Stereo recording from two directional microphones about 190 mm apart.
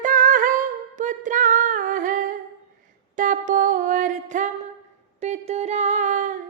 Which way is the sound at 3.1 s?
45° right (ahead or behind).